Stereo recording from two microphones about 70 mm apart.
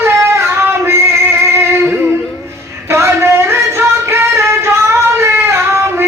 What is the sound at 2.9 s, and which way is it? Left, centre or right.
Music, right.